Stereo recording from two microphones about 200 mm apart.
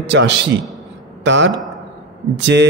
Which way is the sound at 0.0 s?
65° right (ahead or behind).